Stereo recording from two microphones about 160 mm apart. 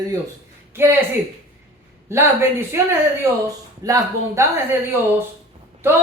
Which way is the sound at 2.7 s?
15° right (ahead or behind).